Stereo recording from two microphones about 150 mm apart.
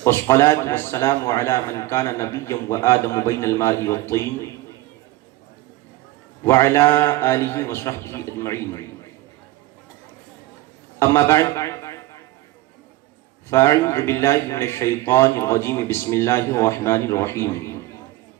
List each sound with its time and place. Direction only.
0.0 s a man's voice: 20° left (ahead or behind)
6.4 s a man's voice: 15° left (ahead or behind)
11.0 s a man's voice: 15° left (ahead or behind)
13.5 s a man's voice: 20° left (ahead or behind)